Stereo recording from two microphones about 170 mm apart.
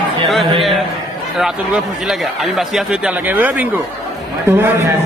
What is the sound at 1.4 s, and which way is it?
A man's voice, centre (ahead or behind).